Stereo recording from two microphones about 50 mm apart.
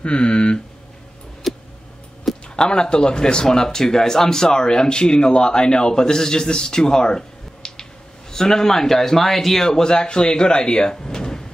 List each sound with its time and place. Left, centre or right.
0.0 s speech: left
1.5 s tick: centre
2.5 s speech: centre